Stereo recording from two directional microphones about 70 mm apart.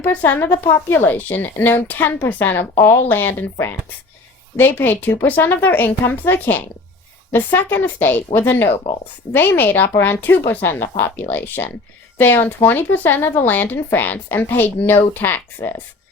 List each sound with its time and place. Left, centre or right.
0.0 s a woman's voice: left